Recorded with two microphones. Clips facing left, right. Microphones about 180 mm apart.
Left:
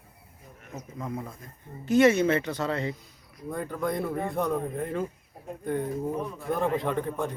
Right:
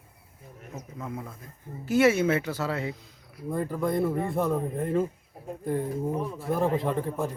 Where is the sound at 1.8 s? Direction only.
5° right (ahead or behind).